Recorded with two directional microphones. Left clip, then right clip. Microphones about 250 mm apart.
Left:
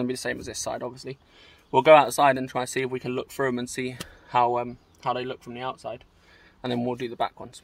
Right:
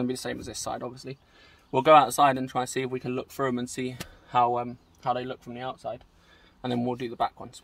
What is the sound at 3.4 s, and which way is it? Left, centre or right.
Speech, centre.